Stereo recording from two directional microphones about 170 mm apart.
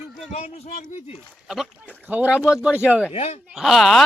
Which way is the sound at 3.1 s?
35° left (ahead or behind).